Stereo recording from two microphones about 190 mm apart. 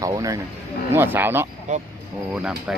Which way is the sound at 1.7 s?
40° right (ahead or behind).